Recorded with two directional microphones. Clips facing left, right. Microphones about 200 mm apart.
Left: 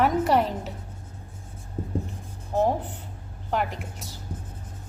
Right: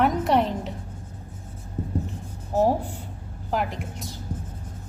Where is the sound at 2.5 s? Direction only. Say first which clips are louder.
Right 2 dB; 10° right (ahead or behind).